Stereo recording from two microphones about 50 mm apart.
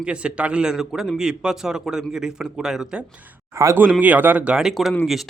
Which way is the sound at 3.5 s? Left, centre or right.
Right.